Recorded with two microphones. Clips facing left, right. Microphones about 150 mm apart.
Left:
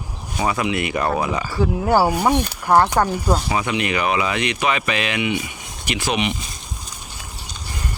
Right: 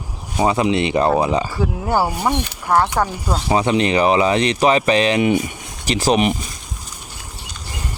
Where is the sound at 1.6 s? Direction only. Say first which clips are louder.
Left 2 dB; 5° left (ahead or behind).